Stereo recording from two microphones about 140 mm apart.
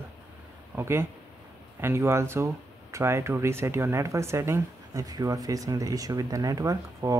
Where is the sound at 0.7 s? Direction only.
15° right (ahead or behind).